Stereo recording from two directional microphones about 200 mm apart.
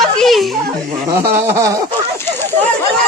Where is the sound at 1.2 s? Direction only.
15° right (ahead or behind).